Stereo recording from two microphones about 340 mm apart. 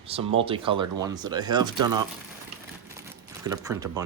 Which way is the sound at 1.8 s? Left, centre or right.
Right.